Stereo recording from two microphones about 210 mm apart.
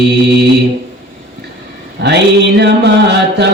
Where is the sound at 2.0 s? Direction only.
55° right (ahead or behind).